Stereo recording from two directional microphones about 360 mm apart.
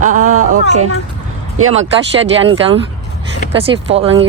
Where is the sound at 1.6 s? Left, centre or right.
Right.